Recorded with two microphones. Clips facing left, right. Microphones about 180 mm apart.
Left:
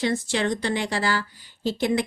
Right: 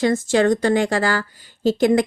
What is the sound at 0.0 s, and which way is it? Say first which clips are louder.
Speech: right 7 dB; 45° right (ahead or behind).